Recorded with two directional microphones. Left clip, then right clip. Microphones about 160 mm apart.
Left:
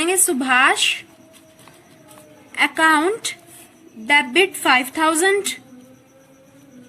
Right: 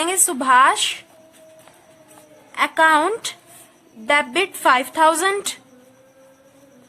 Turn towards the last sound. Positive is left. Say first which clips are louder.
# left 3 dB
turn(degrees=-45)  # may be behind; listen again after turning